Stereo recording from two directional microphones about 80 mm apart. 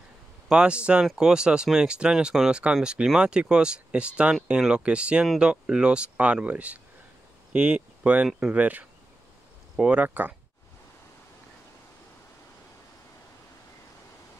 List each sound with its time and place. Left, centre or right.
0.5 s speech: centre